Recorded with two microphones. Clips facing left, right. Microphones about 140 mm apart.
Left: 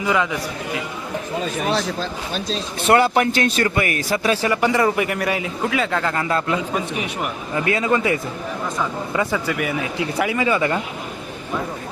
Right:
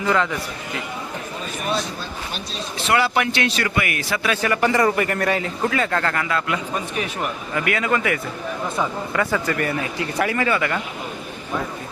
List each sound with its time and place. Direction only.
0.0 s speech: 10° left (ahead or behind)
2.8 s a man's voice: 45° left (ahead or behind)
4.4 s speech: 15° left (ahead or behind)
6.1 s a man's voice: 30° left (ahead or behind)
6.7 s speech: 20° left (ahead or behind)
9.1 s speech: 10° left (ahead or behind)